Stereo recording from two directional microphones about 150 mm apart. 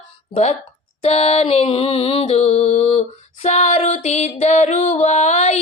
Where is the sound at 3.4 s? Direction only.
50° left (ahead or behind).